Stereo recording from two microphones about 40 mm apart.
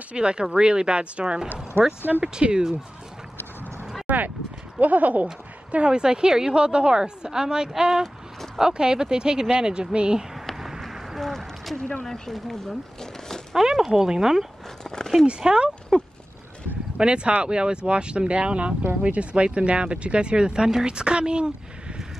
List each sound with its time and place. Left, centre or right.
0.1 s speech: right
1.8 s speech: right
2.5 s speech: right
4.1 s speech: right
5.9 s speech: right
10.4 s a sound: centre
11.1 s a sound: centre
12.0 s speech: centre
13.6 s speech: centre
14.8 s a sound: centre
15.2 s speech: right
15.9 s horse: centre
16.9 s speech: right